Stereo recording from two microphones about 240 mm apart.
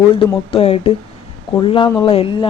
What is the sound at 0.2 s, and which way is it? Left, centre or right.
Speech, left.